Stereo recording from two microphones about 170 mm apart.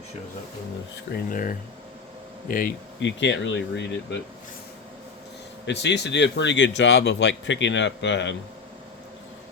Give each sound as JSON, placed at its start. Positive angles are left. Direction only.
{"t": 1.1, "sound": "speech", "side_deg": 55}
{"t": 3.0, "sound": "speech", "side_deg": 90}
{"t": 5.6, "sound": "speech", "side_deg": 90}